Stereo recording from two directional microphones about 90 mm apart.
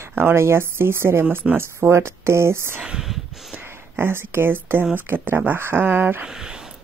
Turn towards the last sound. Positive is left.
turn(degrees=-5)  # may be behind; listen again after turning